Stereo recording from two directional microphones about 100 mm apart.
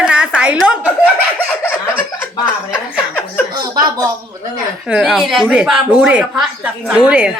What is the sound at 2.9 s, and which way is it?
Chuckle, 15° left (ahead or behind).